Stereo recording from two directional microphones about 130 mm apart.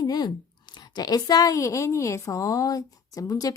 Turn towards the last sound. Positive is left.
turn(degrees=30)  # may be behind; listen again after turning